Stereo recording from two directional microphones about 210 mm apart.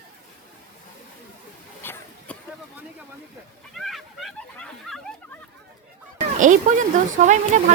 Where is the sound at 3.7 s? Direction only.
Centre (ahead or behind).